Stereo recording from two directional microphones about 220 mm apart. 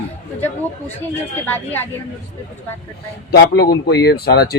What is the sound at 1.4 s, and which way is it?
Speech, 10° left (ahead or behind).